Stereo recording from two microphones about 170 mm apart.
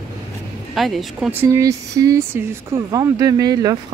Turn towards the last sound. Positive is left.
turn(degrees=-25)  # may be behind; listen again after turning